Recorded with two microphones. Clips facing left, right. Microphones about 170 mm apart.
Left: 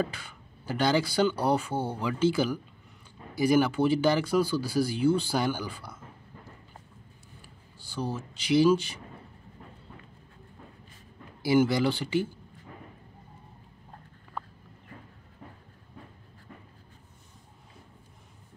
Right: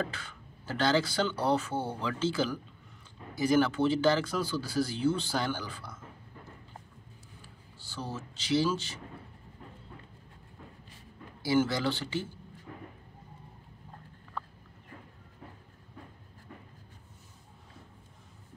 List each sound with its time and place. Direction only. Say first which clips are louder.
0.0 s speech: left 4 dB; 10° left (ahead or behind)
7.4 s speech: even; 15° left (ahead or behind)
11.4 s speech: left 4 dB; 15° left (ahead or behind)